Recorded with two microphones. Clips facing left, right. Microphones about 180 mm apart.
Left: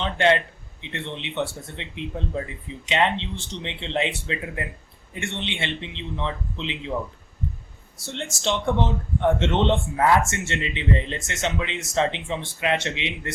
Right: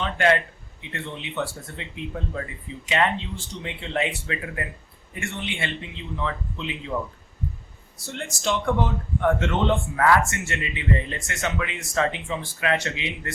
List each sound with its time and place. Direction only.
0.0 s speech: 25° left (ahead or behind)
8.0 s speech: 25° left (ahead or behind)